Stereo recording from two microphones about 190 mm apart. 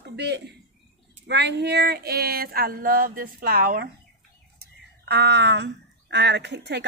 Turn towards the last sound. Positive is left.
turn(degrees=-65)  # may be behind; listen again after turning